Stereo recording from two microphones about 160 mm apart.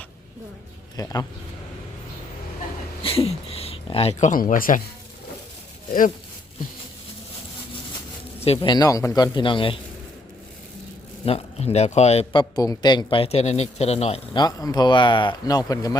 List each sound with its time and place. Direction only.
0.9 s speech: 20° left (ahead or behind)
3.0 s speech: 35° left (ahead or behind); by 4.8 s 60° left (ahead or behind)
8.4 s speech: 30° left (ahead or behind)
11.3 s speech: 40° left (ahead or behind)
12.3 s speech: 25° left (ahead or behind)
14.3 s speech: 25° left (ahead or behind)